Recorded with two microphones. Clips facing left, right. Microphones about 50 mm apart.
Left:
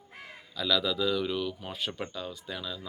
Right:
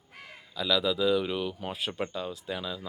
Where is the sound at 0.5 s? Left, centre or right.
Centre.